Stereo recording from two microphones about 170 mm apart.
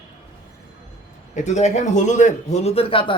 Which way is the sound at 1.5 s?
40° left (ahead or behind).